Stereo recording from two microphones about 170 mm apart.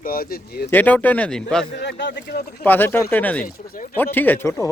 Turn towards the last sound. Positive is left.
turn(degrees=15)  # may be behind; listen again after turning